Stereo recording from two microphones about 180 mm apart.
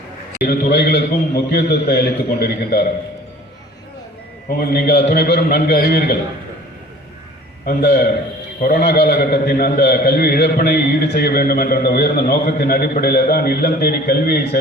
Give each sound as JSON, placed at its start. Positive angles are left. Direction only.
{"t": 0.4, "sound": "a man's voice", "side_deg": 60}
{"t": 4.4, "sound": "a man's voice", "side_deg": 60}
{"t": 7.6, "sound": "a man's voice", "side_deg": 60}